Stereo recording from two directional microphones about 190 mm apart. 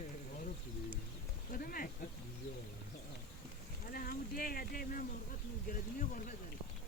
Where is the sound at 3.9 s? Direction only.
50° left (ahead or behind).